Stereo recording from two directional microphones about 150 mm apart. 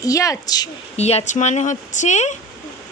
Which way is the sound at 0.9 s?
45° left (ahead or behind).